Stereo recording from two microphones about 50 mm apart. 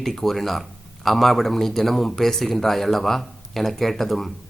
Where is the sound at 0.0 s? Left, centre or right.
Centre.